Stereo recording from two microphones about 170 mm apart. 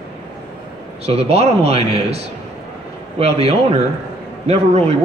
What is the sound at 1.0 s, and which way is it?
Speech, 35° right (ahead or behind).